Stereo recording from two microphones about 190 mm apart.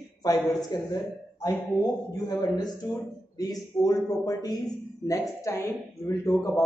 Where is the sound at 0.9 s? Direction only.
15° left (ahead or behind).